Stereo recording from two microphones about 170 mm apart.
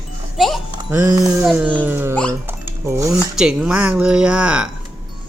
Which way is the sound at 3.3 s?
5° right (ahead or behind).